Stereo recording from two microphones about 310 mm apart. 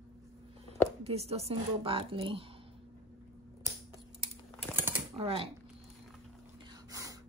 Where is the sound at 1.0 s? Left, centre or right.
Centre.